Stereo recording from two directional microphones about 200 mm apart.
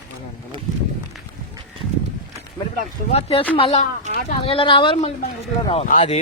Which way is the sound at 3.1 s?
30° left (ahead or behind).